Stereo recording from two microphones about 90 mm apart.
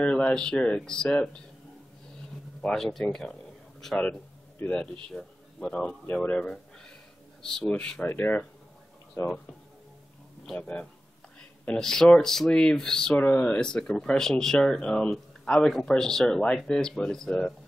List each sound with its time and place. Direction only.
0.0 s speech: 10° left (ahead or behind)
2.6 s speech: 5° left (ahead or behind)
4.1 s a sound: 15° left (ahead or behind)
5.0 s speech: 10° left (ahead or behind)
8.0 s speech: 25° left (ahead or behind)
10.4 s speech: 5° left (ahead or behind)
13.2 s speech: 20° left (ahead or behind)